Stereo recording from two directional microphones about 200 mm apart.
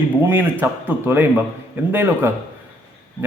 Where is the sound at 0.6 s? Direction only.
10° right (ahead or behind).